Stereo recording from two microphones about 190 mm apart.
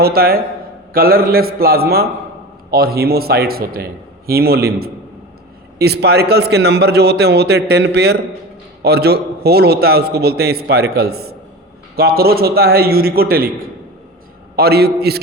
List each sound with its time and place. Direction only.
0.0 s a man's voice: 55° right (ahead or behind)
14.5 s a man's voice: 55° right (ahead or behind)